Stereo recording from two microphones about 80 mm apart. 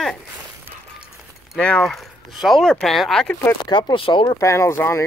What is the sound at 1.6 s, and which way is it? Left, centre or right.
Speech, centre.